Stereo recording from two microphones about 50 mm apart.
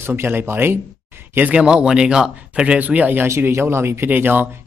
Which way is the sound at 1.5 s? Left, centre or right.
Right.